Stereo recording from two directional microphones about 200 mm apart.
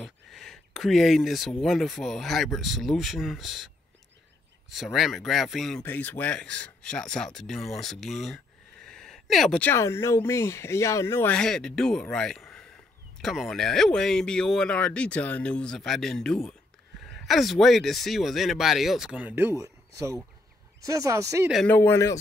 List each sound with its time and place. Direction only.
0.0 s speech: centre (ahead or behind); by 21.5 s 15° right (ahead or behind)
21.5 s speech: centre (ahead or behind)
21.7 s speech: 15° left (ahead or behind)